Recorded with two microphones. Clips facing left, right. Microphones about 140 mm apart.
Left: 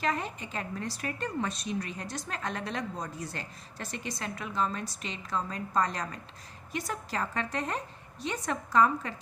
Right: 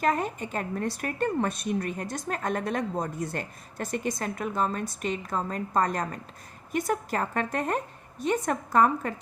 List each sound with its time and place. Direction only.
0.0 s a woman's voice: 50° right (ahead or behind)